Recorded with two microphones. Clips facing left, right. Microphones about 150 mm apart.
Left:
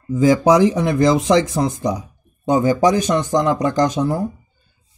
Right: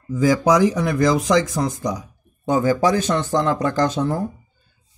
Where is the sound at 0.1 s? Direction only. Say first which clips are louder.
Left 3 dB; 25° left (ahead or behind).